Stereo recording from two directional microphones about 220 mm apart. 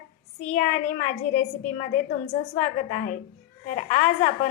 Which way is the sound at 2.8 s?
35° left (ahead or behind).